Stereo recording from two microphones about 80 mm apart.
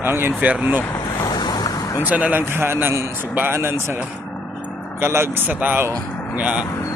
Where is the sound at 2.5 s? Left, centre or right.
Right.